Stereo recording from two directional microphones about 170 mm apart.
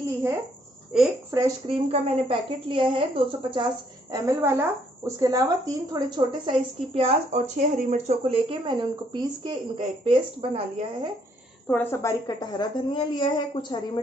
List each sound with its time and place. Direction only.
1.3 s speech: 15° right (ahead or behind)
1.7 s a woman's voice: 30° right (ahead or behind)
4.1 s speech: 15° right (ahead or behind)
6.9 s speech: 40° right (ahead or behind)
8.2 s speech: 30° right (ahead or behind)
11.6 s a woman's voice: 10° left (ahead or behind)